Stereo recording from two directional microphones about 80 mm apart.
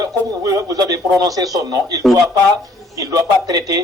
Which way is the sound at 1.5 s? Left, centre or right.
Right.